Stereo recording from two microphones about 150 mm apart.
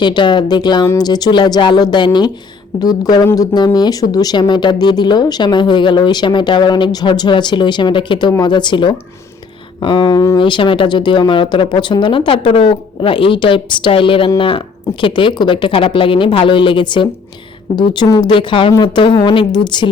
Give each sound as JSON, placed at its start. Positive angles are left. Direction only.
{"t": 0.0, "sound": "speech", "side_deg": 30}